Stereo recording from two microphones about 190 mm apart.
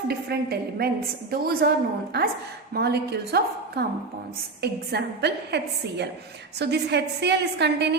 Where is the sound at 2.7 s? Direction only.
60° right (ahead or behind).